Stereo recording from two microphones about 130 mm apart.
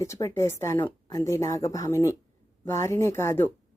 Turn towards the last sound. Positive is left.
turn(degrees=20)  # may be behind; listen again after turning